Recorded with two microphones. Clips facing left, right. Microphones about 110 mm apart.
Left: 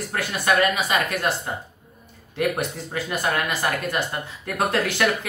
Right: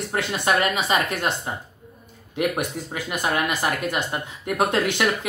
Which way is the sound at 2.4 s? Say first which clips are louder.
Even; 15° right (ahead or behind).